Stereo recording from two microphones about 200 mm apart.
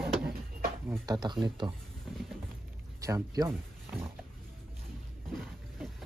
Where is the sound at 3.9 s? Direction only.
15° right (ahead or behind).